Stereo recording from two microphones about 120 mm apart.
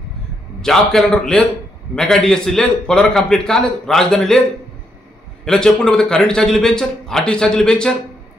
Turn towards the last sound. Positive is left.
turn(degrees=5)  # may be behind; listen again after turning